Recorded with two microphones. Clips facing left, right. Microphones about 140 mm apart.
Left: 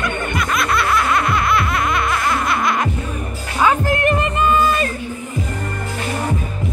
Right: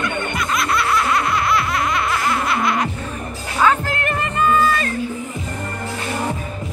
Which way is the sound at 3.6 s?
15° left (ahead or behind).